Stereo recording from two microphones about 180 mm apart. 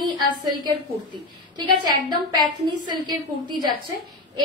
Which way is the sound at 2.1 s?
25° right (ahead or behind).